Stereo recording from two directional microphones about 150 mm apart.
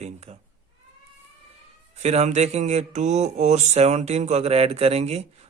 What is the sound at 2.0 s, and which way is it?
Speech, 45° right (ahead or behind).